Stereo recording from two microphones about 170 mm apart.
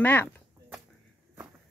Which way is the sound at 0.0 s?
10° left (ahead or behind).